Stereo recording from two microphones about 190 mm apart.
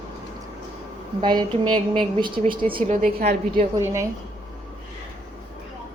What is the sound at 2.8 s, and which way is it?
Speech, 45° right (ahead or behind).